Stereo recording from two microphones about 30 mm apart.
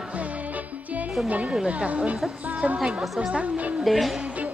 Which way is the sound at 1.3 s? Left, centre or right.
Right.